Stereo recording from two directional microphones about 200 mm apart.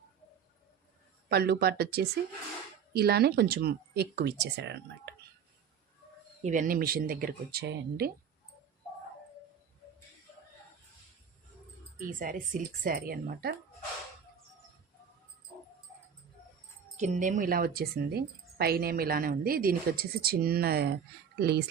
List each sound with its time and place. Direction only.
1.3 s a woman's voice: 55° right (ahead or behind)
6.4 s a woman's voice: 40° right (ahead or behind)
11.9 s a woman's voice: 45° right (ahead or behind)
17.0 s a woman's voice: 40° right (ahead or behind)